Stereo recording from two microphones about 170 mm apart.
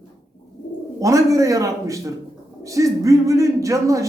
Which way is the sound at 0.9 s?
20° right (ahead or behind).